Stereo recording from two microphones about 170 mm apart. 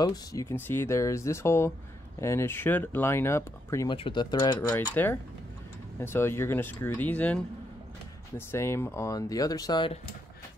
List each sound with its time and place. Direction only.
0.0 s speech: 20° left (ahead or behind)
3.9 s speech: 30° left (ahead or behind)
4.9 s speech: 10° left (ahead or behind)
8.4 s speech: 15° left (ahead or behind)